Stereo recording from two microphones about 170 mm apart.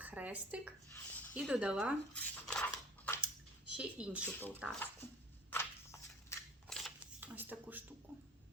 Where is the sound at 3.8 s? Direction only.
5° right (ahead or behind).